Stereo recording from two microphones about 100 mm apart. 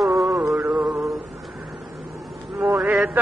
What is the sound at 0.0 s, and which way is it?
Mantra, centre (ahead or behind).